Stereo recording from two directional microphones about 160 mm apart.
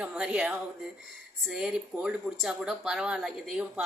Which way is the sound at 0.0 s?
10° right (ahead or behind).